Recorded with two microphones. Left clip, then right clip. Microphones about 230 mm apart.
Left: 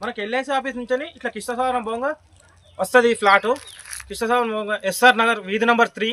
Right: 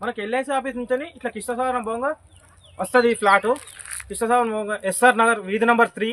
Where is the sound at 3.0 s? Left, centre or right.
Centre.